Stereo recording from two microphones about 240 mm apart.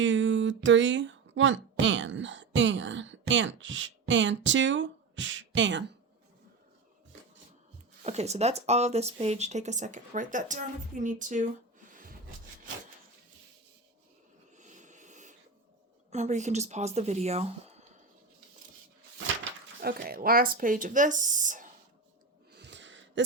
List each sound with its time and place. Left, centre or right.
0.0 s speech: right
8.0 s speech: right
14.6 s a sound: right
16.1 s speech: right
19.8 s speech: right
22.5 s a sound: right